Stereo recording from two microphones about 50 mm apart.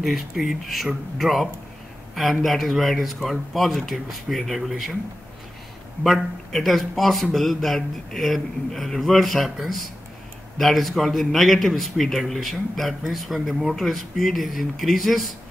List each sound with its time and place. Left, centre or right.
0.0 s a man's voice: centre
6.0 s a man's voice: centre